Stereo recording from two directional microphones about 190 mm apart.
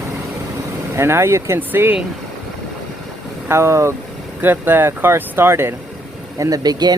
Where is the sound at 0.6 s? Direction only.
15° right (ahead or behind).